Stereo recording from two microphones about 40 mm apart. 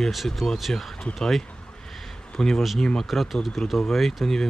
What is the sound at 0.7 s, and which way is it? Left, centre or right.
Speech, left.